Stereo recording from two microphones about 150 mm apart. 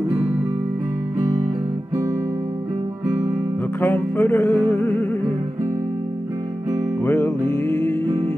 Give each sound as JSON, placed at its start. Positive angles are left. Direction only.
{"t": 3.8, "sound": "music", "side_deg": 15}
{"t": 7.1, "sound": "music", "side_deg": 15}